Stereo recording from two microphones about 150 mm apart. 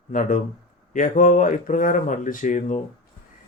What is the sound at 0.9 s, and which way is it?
Speech, 60° left (ahead or behind).